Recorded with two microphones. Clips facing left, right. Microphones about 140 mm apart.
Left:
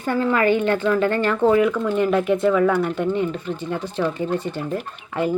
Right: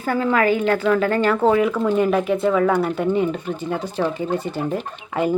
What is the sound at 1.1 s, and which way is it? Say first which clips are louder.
Speech: even; 15° right (ahead or behind).